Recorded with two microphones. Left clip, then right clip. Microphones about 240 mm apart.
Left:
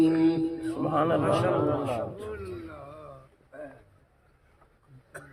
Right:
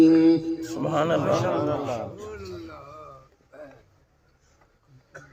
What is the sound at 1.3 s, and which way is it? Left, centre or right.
Speech, right.